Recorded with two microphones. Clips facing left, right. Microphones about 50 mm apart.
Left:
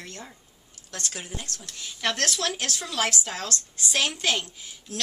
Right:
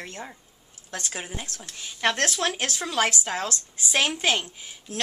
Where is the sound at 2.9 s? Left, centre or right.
Centre.